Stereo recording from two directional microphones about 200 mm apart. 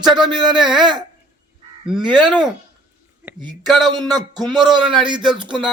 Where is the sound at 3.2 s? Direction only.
10° right (ahead or behind).